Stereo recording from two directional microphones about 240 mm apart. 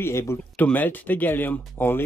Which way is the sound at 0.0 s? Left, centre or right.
Centre.